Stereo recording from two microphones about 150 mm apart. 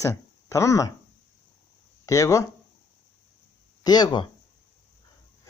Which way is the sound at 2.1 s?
20° left (ahead or behind).